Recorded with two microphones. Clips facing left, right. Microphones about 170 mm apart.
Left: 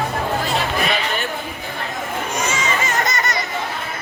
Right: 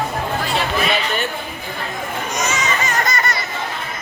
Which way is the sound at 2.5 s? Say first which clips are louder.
Even; 25° left (ahead or behind).